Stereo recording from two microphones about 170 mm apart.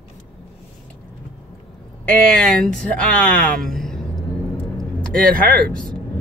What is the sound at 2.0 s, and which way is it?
Speech, 5° left (ahead or behind).